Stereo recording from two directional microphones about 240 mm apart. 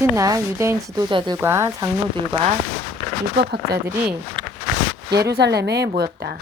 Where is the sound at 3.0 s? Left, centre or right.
Left.